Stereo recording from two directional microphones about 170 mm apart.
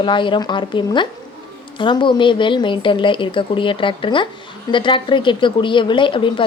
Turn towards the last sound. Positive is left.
turn(degrees=30)  # may be behind; listen again after turning